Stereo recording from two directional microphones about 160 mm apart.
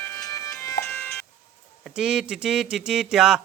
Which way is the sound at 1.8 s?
5° right (ahead or behind).